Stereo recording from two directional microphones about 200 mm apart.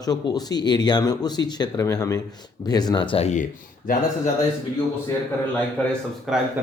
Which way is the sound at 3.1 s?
35° left (ahead or behind).